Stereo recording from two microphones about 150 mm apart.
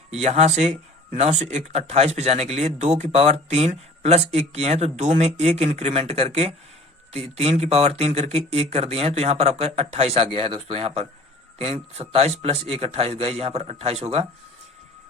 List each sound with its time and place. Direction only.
0.1 s speech: 45° right (ahead or behind)